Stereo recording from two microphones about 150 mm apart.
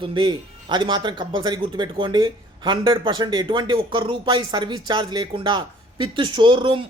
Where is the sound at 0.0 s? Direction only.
35° right (ahead or behind).